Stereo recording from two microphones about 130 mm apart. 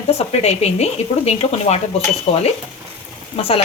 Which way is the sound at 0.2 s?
55° left (ahead or behind).